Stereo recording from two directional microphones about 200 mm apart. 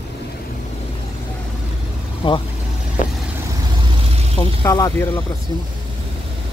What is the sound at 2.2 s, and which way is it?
Speech, 25° left (ahead or behind).